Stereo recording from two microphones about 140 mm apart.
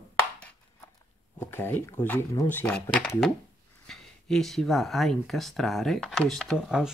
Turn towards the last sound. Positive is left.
turn(degrees=-5)  # may be behind; listen again after turning